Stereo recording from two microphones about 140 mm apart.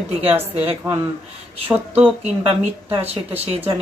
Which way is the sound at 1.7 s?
10° right (ahead or behind).